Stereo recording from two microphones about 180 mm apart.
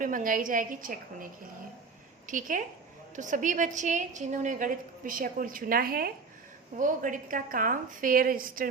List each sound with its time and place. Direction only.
0.0 s a woman's voice: 50° right (ahead or behind)